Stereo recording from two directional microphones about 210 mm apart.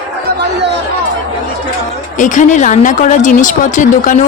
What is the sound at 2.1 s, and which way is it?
Speech, 35° left (ahead or behind).